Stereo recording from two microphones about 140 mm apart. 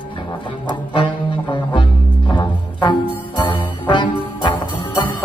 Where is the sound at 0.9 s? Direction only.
40° left (ahead or behind).